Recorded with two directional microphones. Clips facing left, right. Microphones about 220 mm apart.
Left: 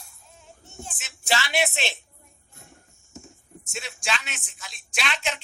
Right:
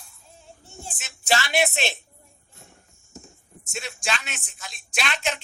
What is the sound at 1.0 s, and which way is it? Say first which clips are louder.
Speech: right 3 dB; 45° right (ahead or behind).